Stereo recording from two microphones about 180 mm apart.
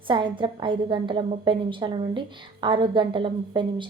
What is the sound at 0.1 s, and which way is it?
A woman's voice, 25° right (ahead or behind).